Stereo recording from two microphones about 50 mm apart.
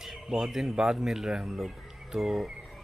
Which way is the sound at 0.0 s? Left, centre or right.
Centre.